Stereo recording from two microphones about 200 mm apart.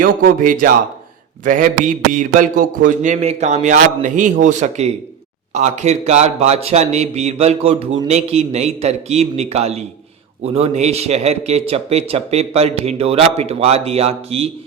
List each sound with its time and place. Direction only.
0.0 s speech: 45° right (ahead or behind)